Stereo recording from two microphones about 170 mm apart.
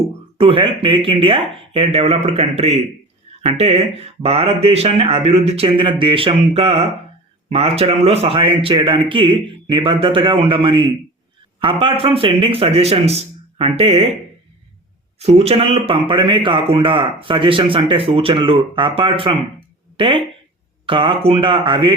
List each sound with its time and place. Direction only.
0.3 s speech: 30° right (ahead or behind)
15.2 s speech: 35° right (ahead or behind)